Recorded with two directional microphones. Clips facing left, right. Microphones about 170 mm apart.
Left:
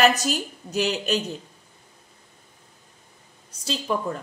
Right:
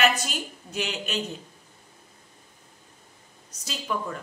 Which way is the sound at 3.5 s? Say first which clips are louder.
Left 5 dB; 30° left (ahead or behind).